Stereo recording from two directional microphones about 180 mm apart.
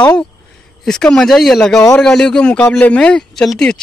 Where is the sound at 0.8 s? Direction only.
5° left (ahead or behind).